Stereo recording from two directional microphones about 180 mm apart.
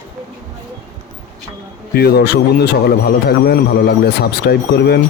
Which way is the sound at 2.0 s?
60° left (ahead or behind).